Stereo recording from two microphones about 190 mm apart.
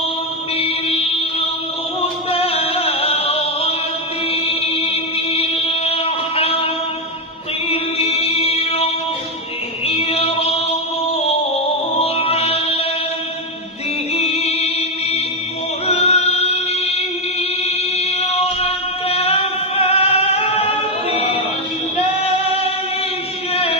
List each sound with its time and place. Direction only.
0.6 s music: 30° left (ahead or behind)
7.7 s chant: 30° left (ahead or behind)
9.8 s a sound: 30° left (ahead or behind)
11.9 s mantra: 30° left (ahead or behind)
14.1 s music: 35° left (ahead or behind)
15.9 s choir: 35° left (ahead or behind)
17.9 s chant: 35° left (ahead or behind)